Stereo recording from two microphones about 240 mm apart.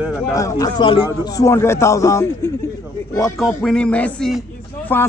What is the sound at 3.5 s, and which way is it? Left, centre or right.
Music, centre.